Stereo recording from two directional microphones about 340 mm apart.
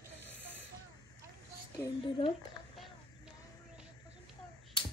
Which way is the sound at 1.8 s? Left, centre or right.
Centre.